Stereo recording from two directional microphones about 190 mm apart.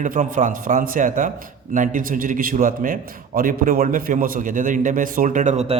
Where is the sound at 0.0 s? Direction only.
45° right (ahead or behind).